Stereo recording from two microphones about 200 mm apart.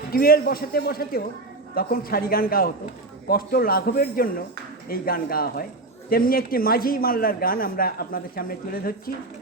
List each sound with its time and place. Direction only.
0.1 s speech: 50° left (ahead or behind)